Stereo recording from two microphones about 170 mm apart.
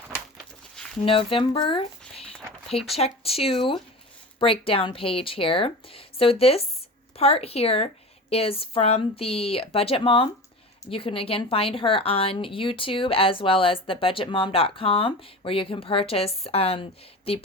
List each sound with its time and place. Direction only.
1.0 s a woman's voice: 30° left (ahead or behind)